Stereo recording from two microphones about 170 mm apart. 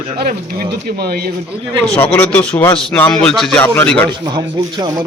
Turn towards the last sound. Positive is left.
turn(degrees=10)  # may be behind; listen again after turning